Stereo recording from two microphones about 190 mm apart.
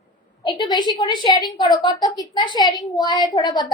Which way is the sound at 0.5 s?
20° left (ahead or behind).